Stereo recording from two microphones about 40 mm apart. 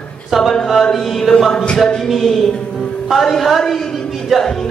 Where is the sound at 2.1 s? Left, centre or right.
Centre.